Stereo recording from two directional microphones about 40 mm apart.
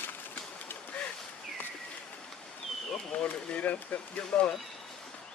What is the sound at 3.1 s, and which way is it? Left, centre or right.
Speech, left.